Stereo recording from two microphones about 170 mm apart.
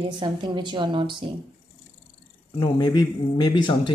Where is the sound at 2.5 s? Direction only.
30° left (ahead or behind).